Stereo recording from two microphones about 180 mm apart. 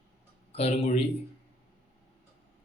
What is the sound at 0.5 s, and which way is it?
Speech, 35° left (ahead or behind).